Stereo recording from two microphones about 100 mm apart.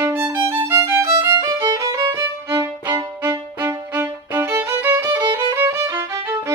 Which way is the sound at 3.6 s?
20° right (ahead or behind).